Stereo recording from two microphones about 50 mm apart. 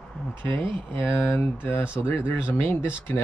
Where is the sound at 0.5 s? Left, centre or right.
Left.